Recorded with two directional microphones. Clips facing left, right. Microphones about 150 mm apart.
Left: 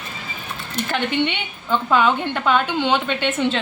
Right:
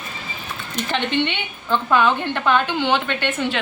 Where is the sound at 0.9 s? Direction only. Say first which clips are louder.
Even; 10° left (ahead or behind).